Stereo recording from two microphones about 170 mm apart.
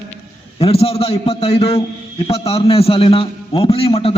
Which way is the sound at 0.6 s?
35° left (ahead or behind).